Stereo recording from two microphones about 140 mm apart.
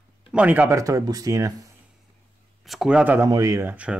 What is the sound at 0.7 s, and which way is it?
Speech, 25° right (ahead or behind).